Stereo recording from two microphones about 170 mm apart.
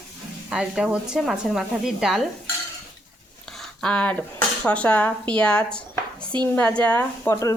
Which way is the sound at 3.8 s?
5° left (ahead or behind).